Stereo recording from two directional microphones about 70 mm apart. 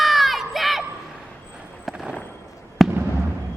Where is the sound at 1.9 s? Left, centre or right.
Centre.